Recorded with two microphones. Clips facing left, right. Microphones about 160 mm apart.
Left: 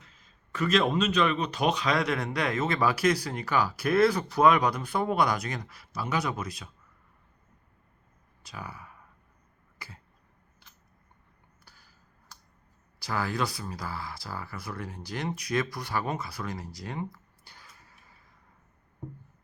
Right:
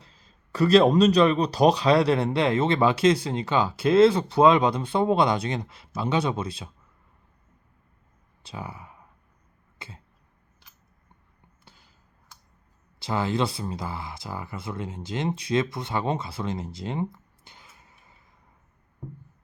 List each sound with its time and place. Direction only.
0.0 s speech: 35° right (ahead or behind)
8.4 s speech: 25° right (ahead or behind)
9.7 s cough: 25° right (ahead or behind)
11.6 s a sound: 20° right (ahead or behind)
13.0 s speech: 25° right (ahead or behind)